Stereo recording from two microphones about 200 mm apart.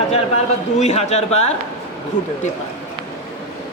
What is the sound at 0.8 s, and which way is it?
Speech, 30° left (ahead or behind).